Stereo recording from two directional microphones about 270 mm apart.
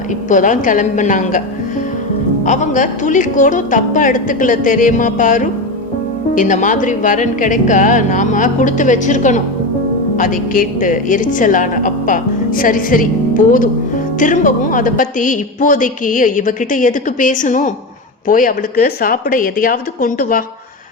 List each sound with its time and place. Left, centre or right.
0.3 s a woman's voice: left
2.4 s a woman's voice: left